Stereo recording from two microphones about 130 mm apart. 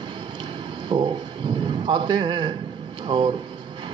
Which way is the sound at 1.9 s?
35° right (ahead or behind).